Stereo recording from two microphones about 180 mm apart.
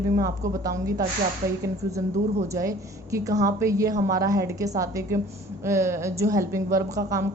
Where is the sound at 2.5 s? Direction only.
15° right (ahead or behind).